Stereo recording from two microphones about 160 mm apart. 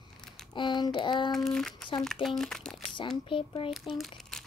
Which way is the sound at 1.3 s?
Centre (ahead or behind).